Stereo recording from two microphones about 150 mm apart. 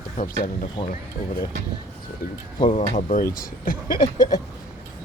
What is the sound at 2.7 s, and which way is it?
Speech, 50° left (ahead or behind).